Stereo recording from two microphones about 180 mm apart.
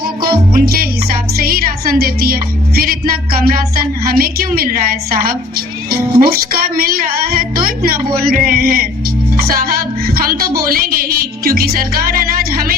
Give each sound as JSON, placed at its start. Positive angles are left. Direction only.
{"t": 0.0, "sound": "speech", "side_deg": -55}